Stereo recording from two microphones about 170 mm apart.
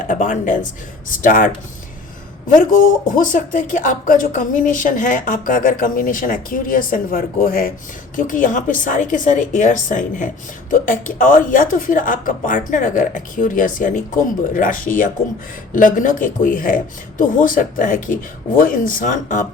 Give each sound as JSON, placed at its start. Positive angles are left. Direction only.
{"t": 0.1, "sound": "speech", "side_deg": 50}
{"t": 2.5, "sound": "speech", "side_deg": 50}